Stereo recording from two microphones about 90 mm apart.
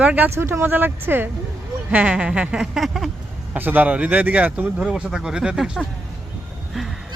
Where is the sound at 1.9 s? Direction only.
10° right (ahead or behind).